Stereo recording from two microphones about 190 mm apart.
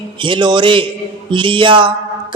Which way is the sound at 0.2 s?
25° right (ahead or behind).